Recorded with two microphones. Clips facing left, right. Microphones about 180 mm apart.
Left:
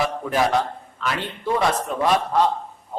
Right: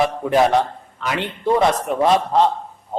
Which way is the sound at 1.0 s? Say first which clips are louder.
Right 4 dB; 20° right (ahead or behind).